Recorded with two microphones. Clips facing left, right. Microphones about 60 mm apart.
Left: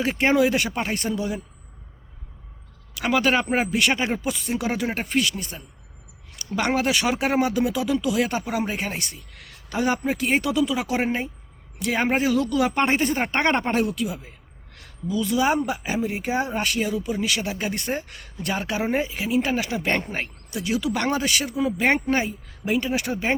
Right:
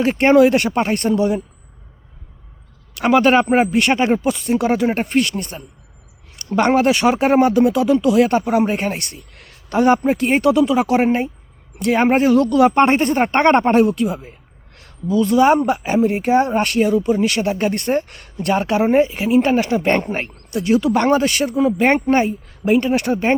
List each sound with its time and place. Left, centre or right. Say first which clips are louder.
0.0 s speech: right 8 dB; right
2.9 s speech: right 8 dB; right